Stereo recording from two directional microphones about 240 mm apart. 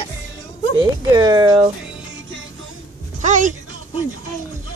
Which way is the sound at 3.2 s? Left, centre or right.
Right.